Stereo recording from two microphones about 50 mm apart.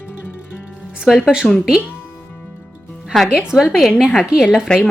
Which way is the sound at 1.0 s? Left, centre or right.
Centre.